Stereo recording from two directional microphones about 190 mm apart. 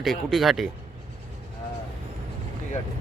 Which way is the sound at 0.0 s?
Centre (ahead or behind).